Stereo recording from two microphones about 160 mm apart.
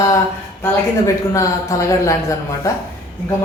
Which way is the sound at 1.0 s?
20° left (ahead or behind).